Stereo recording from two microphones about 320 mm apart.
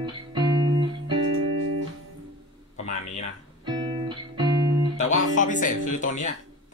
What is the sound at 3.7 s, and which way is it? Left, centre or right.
Music, centre.